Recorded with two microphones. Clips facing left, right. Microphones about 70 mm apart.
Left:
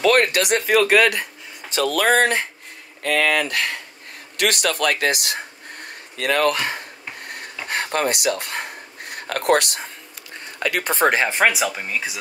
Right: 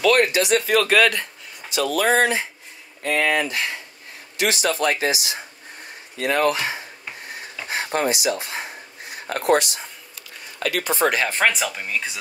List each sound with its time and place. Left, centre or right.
0.0 s speech: left
0.7 s speech: centre
1.7 s speech: left
4.4 s a sound: left
7.6 s speech: left
11.3 s speech: centre